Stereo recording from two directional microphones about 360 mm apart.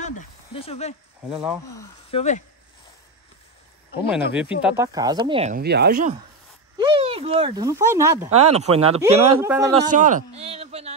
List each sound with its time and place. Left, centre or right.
0.6 s speech: centre
1.3 s speech: centre
1.7 s speech: centre
4.1 s speech: centre
9.8 s speech: right